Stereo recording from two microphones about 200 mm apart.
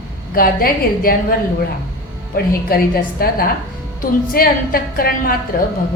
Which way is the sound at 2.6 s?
45° left (ahead or behind).